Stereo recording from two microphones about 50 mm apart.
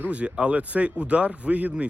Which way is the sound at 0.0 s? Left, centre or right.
Right.